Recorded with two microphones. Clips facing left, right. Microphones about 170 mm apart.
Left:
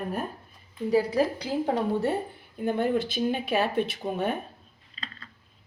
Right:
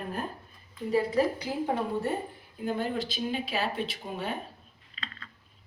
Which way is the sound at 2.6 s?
60° left (ahead or behind).